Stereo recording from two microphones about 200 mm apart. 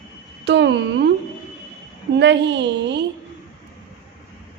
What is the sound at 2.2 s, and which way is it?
Speech, 60° right (ahead or behind).